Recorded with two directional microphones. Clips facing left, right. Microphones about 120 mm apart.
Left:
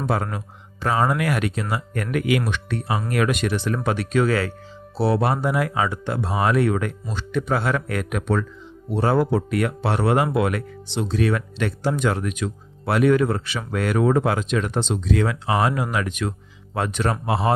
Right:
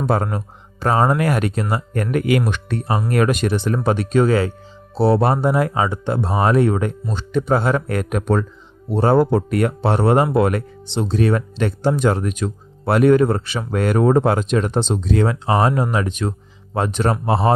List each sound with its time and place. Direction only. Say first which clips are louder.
0.1 s speech: right 4 dB; 35° right (ahead or behind)